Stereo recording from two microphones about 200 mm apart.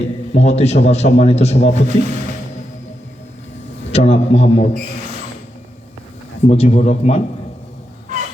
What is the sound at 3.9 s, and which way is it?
Speech, 30° left (ahead or behind).